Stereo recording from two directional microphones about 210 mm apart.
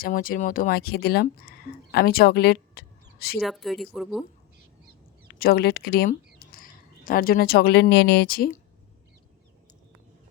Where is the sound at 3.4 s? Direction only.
Centre (ahead or behind).